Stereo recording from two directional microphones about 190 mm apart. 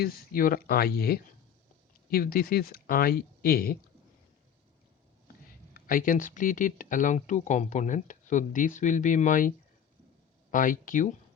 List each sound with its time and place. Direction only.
0.0 s speech: 50° left (ahead or behind)
5.7 s speech: 45° left (ahead or behind)
10.5 s speech: 45° left (ahead or behind)